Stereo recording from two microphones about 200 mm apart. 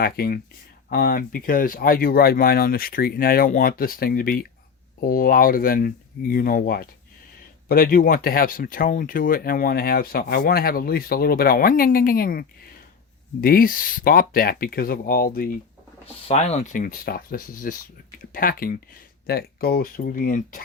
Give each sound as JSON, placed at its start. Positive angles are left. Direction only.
{"t": 0.0, "sound": "speech", "side_deg": 50}
{"t": 16.0, "sound": "speech", "side_deg": 30}